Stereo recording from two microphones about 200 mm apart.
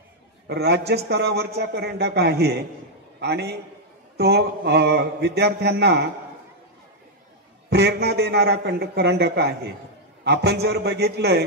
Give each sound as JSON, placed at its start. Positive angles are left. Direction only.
{"t": 0.5, "sound": "a man's voice", "side_deg": -55}
{"t": 7.7, "sound": "a man's voice", "side_deg": -55}